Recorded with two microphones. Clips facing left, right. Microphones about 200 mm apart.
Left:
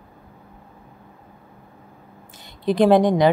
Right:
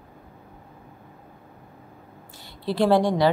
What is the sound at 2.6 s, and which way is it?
Speech, 20° left (ahead or behind).